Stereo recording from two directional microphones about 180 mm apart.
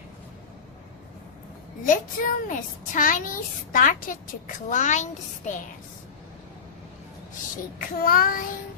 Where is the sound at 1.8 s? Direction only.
45° left (ahead or behind).